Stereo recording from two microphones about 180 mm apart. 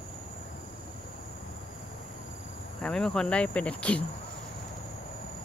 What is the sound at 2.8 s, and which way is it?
Speech, 5° left (ahead or behind).